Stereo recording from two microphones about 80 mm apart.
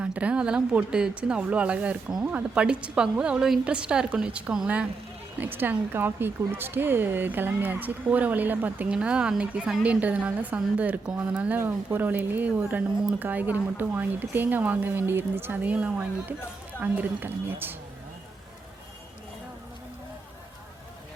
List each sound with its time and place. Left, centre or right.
0.0 s a woman's voice: centre
5.4 s speech: right